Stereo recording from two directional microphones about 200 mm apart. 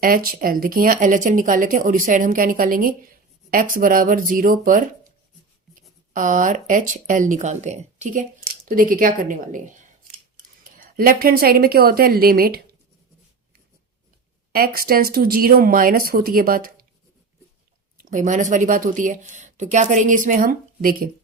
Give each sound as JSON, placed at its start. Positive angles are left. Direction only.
{"t": 0.0, "sound": "speech", "side_deg": -45}
{"t": 6.1, "sound": "speech", "side_deg": -40}
{"t": 10.6, "sound": "a woman's voice", "side_deg": -45}
{"t": 14.5, "sound": "speech", "side_deg": -45}
{"t": 18.1, "sound": "speech", "side_deg": -40}